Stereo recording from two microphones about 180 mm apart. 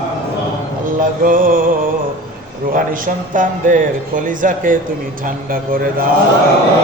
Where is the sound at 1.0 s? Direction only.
50° right (ahead or behind).